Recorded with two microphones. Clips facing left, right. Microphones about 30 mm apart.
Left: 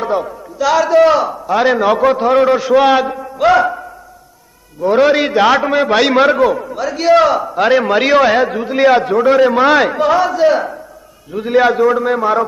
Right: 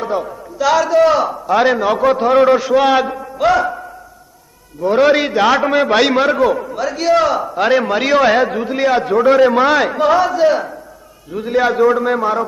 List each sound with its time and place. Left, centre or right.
0.0 s a man's voice: centre
0.8 s a man's voice: centre
1.2 s a man's voice: centre
1.8 s a man's voice: centre
4.8 s a man's voice: centre
6.1 s a man's voice: centre
6.4 s a man's voice: centre
7.1 s a man's voice: centre
8.7 s a man's voice: centre
9.0 s a man's voice: centre
11.7 s a man's voice: centre